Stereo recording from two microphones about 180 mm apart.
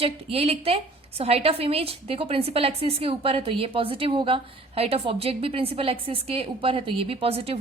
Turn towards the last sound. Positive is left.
turn(degrees=-35)  # may be behind; listen again after turning